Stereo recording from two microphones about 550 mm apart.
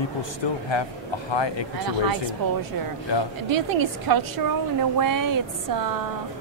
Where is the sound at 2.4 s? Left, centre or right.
Right.